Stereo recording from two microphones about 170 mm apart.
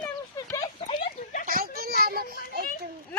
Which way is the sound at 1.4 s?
60° right (ahead or behind).